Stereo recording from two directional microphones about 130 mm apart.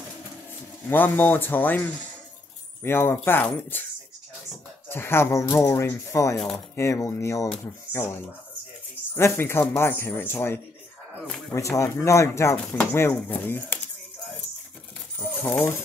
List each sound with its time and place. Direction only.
0.8 s speech: 15° left (ahead or behind)
4.8 s speech: 20° left (ahead or behind)
6.3 s speech: 5° left (ahead or behind)
6.7 s speech: 20° left (ahead or behind)
9.1 s speech: 20° left (ahead or behind)
15.1 s coin: 15° left (ahead or behind)